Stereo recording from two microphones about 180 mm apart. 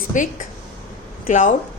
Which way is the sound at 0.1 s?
45° left (ahead or behind).